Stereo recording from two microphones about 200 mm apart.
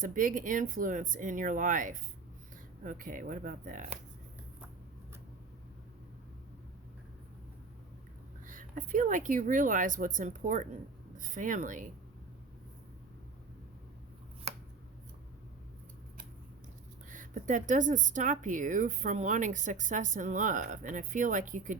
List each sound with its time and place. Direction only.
0.0 s speech: 40° right (ahead or behind)
8.4 s speech: 40° right (ahead or behind)
17.1 s speech: 40° right (ahead or behind)